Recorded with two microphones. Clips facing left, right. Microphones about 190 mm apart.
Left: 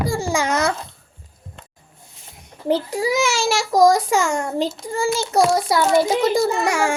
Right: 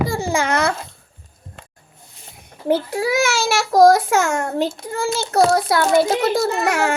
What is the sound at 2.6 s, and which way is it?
Speech, 5° right (ahead or behind).